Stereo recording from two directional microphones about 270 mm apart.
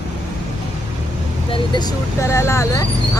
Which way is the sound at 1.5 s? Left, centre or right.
Centre.